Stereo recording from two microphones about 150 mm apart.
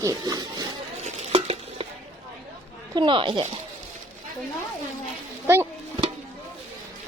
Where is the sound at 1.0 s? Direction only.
45° right (ahead or behind).